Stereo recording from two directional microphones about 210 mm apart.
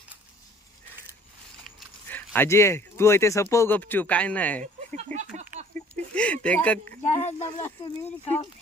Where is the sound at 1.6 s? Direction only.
10° left (ahead or behind).